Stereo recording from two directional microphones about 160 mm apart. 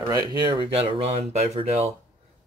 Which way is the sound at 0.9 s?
40° right (ahead or behind).